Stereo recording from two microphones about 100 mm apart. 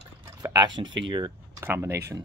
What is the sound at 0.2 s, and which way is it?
Speech, 40° right (ahead or behind).